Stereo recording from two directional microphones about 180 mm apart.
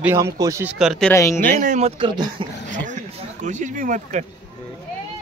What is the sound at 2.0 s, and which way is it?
Speech, 25° right (ahead or behind).